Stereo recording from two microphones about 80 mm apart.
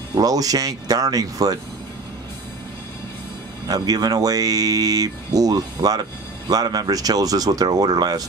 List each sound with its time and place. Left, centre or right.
0.2 s speech: right
3.6 s speech: right